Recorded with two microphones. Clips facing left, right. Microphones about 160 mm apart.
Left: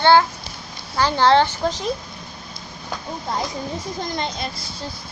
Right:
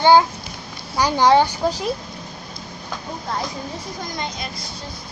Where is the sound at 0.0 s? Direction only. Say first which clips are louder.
Right 1 dB; 15° right (ahead or behind).